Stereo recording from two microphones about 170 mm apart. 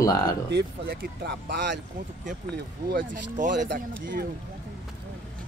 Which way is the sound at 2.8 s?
50° right (ahead or behind).